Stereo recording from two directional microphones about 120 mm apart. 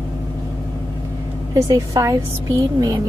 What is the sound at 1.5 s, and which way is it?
Speech, 25° right (ahead or behind).